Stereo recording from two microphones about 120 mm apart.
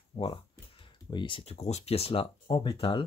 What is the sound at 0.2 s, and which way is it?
Speech, 55° left (ahead or behind).